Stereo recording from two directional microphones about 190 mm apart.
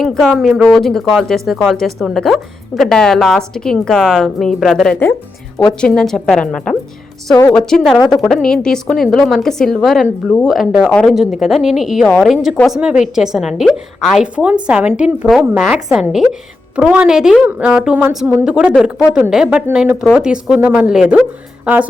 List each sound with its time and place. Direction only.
0.0 s a woman's voice: centre (ahead or behind)
7.9 s a woman's voice: 20° left (ahead or behind)
8.2 s a woman's voice: 5° left (ahead or behind)